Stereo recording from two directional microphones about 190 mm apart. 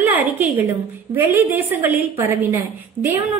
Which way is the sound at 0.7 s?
10° right (ahead or behind).